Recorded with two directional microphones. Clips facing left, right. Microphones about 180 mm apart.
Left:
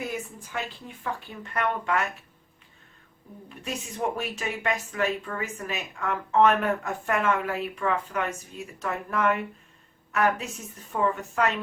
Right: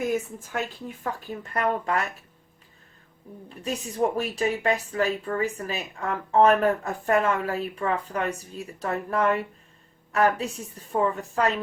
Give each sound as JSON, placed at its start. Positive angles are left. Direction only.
{"t": 0.0, "sound": "speech", "side_deg": -45}
{"t": 3.5, "sound": "speech", "side_deg": -35}